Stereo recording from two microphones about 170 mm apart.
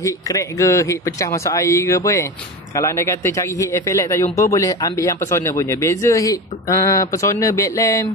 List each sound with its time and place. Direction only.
0.0 s a man's voice: 20° left (ahead or behind)